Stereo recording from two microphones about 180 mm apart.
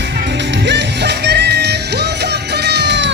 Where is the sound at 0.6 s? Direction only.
70° right (ahead or behind).